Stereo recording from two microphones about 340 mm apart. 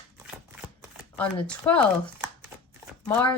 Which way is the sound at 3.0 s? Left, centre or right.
Centre.